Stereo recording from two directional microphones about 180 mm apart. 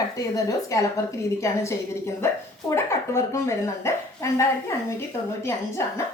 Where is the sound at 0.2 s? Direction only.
20° left (ahead or behind).